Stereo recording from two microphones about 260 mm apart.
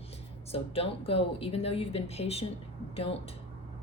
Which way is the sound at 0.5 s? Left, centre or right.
Left.